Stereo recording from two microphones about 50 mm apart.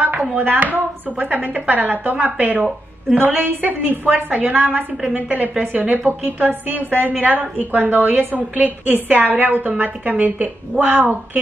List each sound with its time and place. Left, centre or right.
0.4 s a woman's voice: right